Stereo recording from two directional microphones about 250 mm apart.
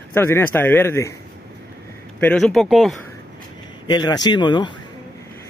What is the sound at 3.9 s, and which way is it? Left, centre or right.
Speech, centre.